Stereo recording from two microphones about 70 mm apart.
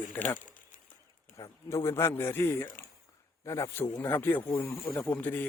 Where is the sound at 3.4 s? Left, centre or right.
Left.